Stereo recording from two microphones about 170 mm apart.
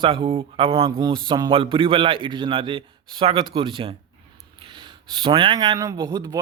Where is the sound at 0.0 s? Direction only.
30° right (ahead or behind).